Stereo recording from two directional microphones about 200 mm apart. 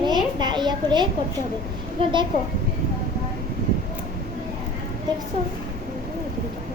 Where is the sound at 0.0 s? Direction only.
20° right (ahead or behind).